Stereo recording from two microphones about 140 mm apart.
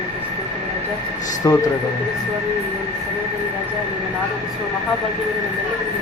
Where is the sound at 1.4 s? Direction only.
25° left (ahead or behind).